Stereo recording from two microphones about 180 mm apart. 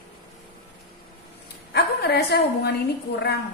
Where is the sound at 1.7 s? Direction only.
65° left (ahead or behind).